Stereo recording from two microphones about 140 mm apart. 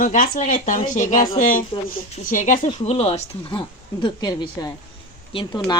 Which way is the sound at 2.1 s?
65° left (ahead or behind).